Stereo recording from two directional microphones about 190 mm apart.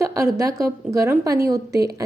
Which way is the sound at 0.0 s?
15° right (ahead or behind).